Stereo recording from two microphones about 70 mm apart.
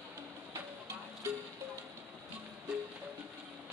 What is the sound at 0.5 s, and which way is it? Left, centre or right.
Music, right.